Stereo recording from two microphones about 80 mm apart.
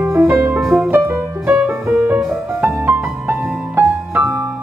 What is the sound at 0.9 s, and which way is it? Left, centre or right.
Music, right.